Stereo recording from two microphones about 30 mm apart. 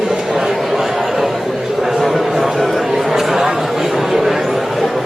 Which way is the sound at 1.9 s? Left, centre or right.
Centre.